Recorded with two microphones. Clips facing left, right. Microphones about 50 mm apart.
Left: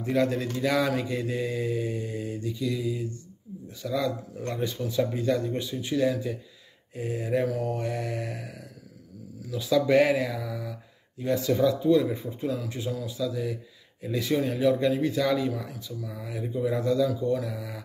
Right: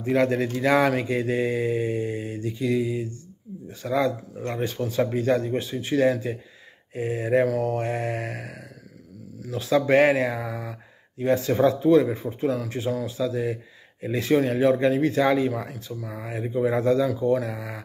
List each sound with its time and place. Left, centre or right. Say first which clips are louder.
0.1 s speech: right 4 dB; right
4.8 s speech: right 3 dB; right
9.7 s speech: right 3 dB; right